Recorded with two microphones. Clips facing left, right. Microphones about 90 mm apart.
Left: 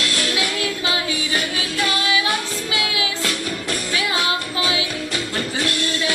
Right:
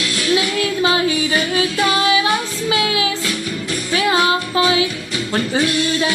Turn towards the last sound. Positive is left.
turn(degrees=-35)  # may be behind; listen again after turning